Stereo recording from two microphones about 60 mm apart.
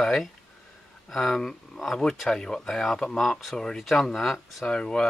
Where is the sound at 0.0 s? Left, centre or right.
Centre.